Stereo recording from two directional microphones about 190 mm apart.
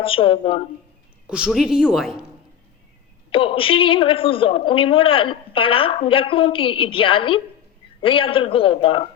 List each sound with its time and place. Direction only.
0.0 s a man's voice: 30° left (ahead or behind)
1.3 s speech: 5° right (ahead or behind)
3.3 s a man's voice: 30° left (ahead or behind)